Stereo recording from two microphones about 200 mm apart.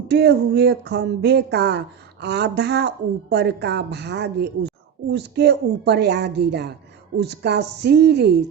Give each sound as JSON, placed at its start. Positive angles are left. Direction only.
{"t": 0.1, "sound": "a woman's voice", "side_deg": -55}